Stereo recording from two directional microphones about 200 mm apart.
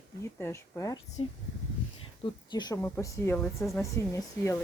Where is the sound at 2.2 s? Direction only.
20° left (ahead or behind).